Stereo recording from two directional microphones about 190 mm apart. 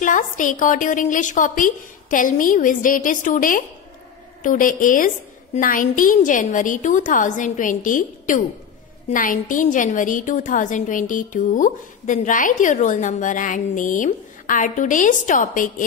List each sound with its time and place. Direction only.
0.0 s a woman's voice: 45° left (ahead or behind)